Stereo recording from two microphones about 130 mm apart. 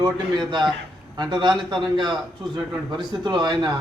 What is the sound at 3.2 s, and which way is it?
Speech, 35° right (ahead or behind).